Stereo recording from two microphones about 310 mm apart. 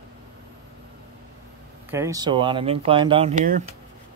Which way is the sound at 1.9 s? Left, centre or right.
Centre.